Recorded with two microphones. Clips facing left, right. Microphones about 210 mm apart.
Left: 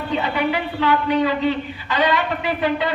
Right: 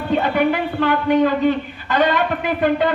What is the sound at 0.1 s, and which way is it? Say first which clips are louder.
A man's voice: right 5 dB; 50° right (ahead or behind).